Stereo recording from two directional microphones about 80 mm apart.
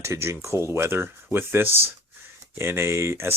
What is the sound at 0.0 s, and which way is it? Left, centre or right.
Speech, right.